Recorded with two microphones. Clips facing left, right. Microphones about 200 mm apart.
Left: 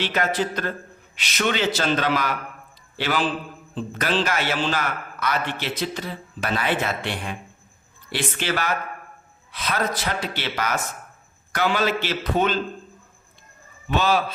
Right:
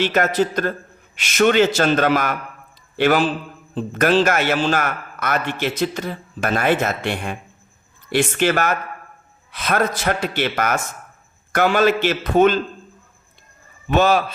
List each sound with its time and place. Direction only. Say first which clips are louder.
0.0 s a man's voice: right 6 dB; 45° right (ahead or behind)
13.9 s a man's voice: right 5 dB; 50° right (ahead or behind)